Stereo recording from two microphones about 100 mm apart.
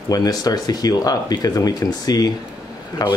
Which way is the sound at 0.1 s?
40° left (ahead or behind).